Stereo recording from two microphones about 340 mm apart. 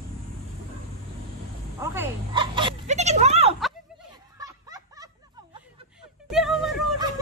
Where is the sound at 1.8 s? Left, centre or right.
Centre.